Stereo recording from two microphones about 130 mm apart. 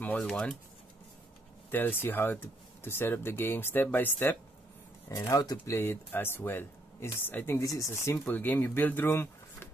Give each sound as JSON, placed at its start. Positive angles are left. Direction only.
{"t": 0.0, "sound": "speech", "side_deg": 10}
{"t": 1.7, "sound": "speech", "side_deg": 15}